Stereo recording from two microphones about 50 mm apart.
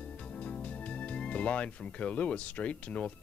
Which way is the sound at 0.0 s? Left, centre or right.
Left.